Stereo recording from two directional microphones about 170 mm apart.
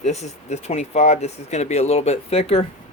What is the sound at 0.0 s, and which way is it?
Speech, 40° left (ahead or behind).